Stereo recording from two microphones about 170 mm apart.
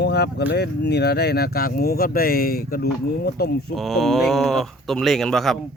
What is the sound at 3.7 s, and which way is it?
Speech, centre (ahead or behind).